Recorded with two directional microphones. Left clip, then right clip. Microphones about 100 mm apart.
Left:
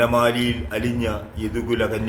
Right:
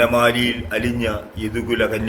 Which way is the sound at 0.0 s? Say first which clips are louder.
Right 3 dB; 20° left (ahead or behind).